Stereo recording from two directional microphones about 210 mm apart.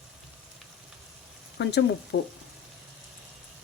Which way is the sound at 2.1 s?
60° left (ahead or behind).